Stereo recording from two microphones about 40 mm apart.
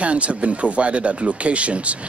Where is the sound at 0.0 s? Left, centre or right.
Right.